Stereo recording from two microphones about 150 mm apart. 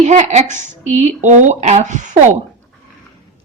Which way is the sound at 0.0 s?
50° right (ahead or behind).